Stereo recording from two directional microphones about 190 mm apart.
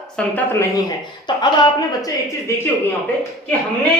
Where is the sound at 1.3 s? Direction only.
25° left (ahead or behind).